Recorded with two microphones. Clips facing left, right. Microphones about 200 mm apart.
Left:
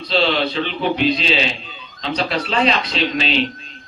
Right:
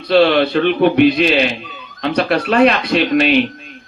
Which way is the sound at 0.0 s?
55° right (ahead or behind).